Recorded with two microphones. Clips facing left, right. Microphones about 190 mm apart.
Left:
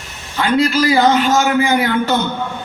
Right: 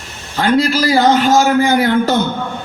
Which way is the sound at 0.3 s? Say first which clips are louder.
Right 1 dB; 40° right (ahead or behind).